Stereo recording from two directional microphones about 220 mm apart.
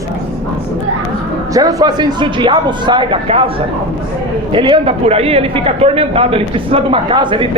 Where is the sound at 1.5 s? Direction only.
15° right (ahead or behind).